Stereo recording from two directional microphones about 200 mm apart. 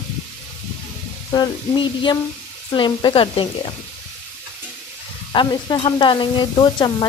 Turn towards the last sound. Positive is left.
turn(degrees=20)  # may be behind; listen again after turning